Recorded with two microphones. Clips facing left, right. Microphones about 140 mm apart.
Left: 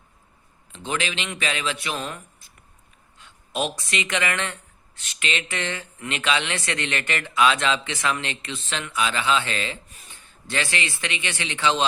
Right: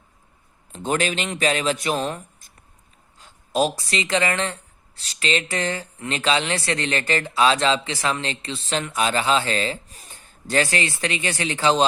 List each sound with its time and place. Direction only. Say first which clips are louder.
0.7 s speech: right 5 dB; 45° right (ahead or behind)